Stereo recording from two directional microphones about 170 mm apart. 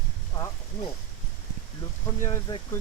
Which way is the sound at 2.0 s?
20° left (ahead or behind).